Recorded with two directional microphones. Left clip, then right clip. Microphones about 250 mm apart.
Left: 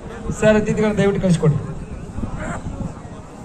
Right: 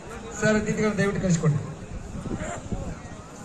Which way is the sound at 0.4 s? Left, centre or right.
Left.